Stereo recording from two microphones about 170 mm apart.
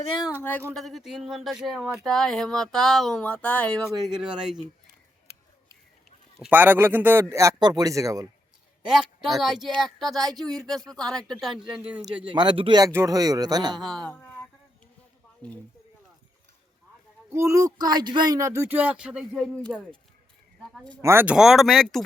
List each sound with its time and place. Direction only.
0.7 s speech: centre (ahead or behind)
6.5 s speech: 10° right (ahead or behind)
8.9 s speech: centre (ahead or behind)
12.3 s speech: 30° right (ahead or behind)
13.7 s speech: centre (ahead or behind)
17.3 s speech: 20° right (ahead or behind); by 21.0 s 5° left (ahead or behind)
21.0 s speech: 15° right (ahead or behind); by 22.0 s 5° left (ahead or behind)